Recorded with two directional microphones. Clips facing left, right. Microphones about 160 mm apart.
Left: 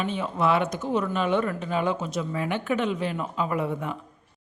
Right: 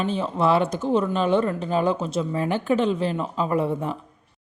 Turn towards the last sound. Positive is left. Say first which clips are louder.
# right 4 dB
turn(degrees=-35)  # may be behind; listen again after turning